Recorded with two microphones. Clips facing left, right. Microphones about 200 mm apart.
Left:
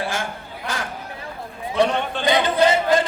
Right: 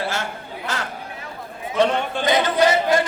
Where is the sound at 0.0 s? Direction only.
15° left (ahead or behind).